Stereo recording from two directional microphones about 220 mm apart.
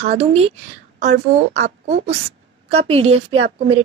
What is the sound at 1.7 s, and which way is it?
Speech, 30° right (ahead or behind).